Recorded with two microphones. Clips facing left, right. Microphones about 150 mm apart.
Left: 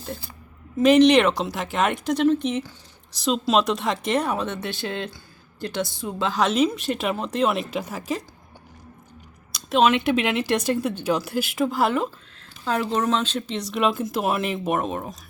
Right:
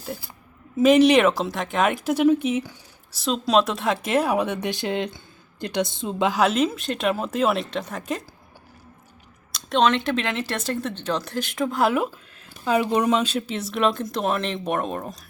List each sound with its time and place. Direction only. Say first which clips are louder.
0.8 s a woman's voice: even; 5° right (ahead or behind)
6.4 s speech: left 3 dB; centre (ahead or behind)
9.5 s speech: left 1 dB; 5° left (ahead or behind)
12.6 s speech: right 3 dB; 10° right (ahead or behind)